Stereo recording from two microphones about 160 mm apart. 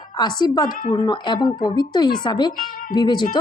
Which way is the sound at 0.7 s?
55° left (ahead or behind).